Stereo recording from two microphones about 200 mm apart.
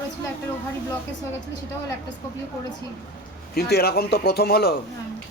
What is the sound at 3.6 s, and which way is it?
A man's voice, 50° left (ahead or behind).